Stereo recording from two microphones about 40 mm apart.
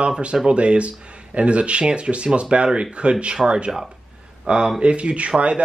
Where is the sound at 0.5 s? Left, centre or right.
Right.